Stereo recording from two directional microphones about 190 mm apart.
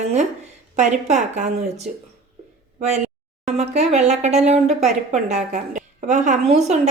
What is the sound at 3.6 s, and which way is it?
Speech, 35° right (ahead or behind).